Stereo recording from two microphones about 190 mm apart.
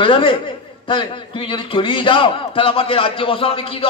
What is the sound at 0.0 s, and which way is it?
A man's voice, 25° left (ahead or behind).